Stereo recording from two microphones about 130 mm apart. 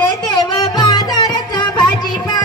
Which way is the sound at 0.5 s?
30° left (ahead or behind).